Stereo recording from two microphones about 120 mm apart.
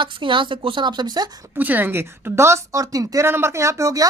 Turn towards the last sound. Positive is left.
turn(degrees=-25)  # may be behind; listen again after turning